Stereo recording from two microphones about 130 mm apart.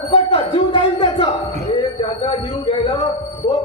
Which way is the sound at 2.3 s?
40° left (ahead or behind).